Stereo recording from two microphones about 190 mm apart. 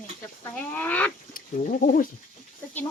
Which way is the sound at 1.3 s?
45° left (ahead or behind).